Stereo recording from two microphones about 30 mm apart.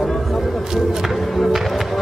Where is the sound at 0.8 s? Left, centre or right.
Centre.